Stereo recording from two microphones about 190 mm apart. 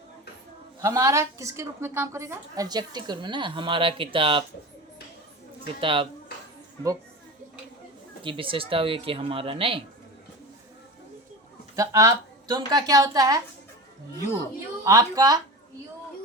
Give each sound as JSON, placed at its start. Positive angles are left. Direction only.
{"t": 0.8, "sound": "a woman's voice", "side_deg": -15}
{"t": 5.8, "sound": "a woman's voice", "side_deg": -25}
{"t": 8.2, "sound": "a woman's voice", "side_deg": -25}
{"t": 11.8, "sound": "a woman's voice", "side_deg": -15}
{"t": 14.8, "sound": "a woman's voice", "side_deg": -20}